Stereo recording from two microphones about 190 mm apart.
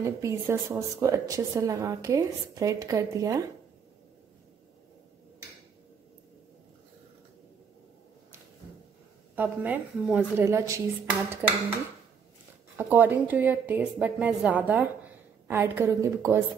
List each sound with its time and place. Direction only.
0.0 s speech: 15° right (ahead or behind)
9.3 s speech: 10° right (ahead or behind)
12.7 s speech: 10° right (ahead or behind)